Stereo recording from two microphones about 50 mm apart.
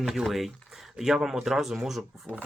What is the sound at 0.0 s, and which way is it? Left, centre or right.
Speech, centre.